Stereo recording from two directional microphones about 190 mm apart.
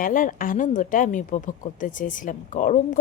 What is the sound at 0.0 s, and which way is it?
A woman's voice, 45° left (ahead or behind).